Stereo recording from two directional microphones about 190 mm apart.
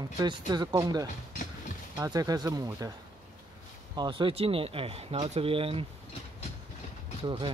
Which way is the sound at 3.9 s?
25° right (ahead or behind).